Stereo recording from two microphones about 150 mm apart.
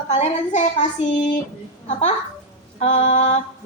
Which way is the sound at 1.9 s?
45° left (ahead or behind).